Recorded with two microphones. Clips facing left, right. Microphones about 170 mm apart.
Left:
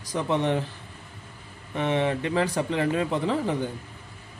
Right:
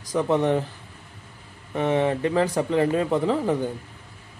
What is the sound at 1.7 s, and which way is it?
Speech, 40° right (ahead or behind).